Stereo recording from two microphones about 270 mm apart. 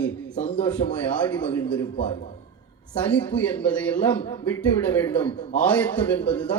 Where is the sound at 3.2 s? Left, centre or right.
Centre.